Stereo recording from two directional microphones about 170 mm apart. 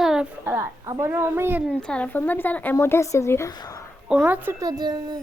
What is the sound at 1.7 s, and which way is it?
Speech, 5° left (ahead or behind).